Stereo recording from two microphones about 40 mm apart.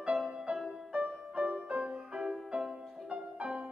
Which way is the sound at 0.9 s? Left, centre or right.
Right.